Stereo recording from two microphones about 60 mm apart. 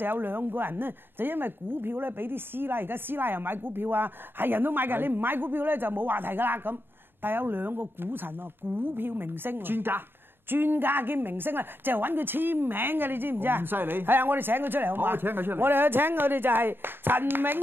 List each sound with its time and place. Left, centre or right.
0.0 s speech: right